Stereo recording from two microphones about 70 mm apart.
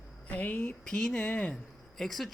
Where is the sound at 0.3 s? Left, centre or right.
Left.